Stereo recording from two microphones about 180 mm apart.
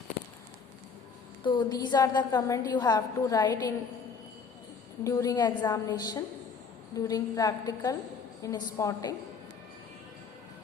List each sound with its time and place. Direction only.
1.5 s a woman's voice: 25° left (ahead or behind)
5.0 s a woman's voice: 20° left (ahead or behind)